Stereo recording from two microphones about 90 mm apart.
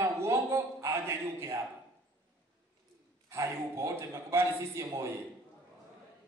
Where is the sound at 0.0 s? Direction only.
30° right (ahead or behind).